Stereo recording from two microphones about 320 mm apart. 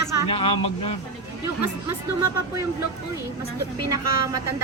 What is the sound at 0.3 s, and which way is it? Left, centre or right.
Speech, centre.